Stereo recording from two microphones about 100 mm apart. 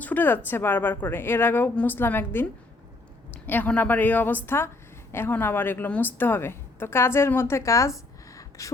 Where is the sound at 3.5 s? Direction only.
15° left (ahead or behind).